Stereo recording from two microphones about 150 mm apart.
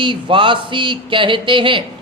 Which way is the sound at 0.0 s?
35° right (ahead or behind).